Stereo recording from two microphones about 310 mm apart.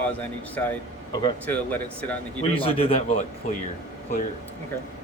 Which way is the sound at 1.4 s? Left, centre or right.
Centre.